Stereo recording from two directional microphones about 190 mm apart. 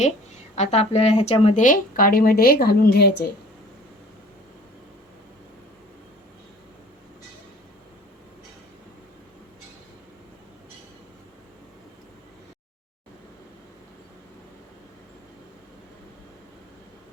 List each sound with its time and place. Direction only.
0.5 s speech: 35° left (ahead or behind); by 3.3 s 60° left (ahead or behind)